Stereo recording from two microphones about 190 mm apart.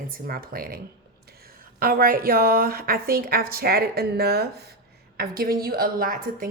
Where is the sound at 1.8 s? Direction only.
50° right (ahead or behind).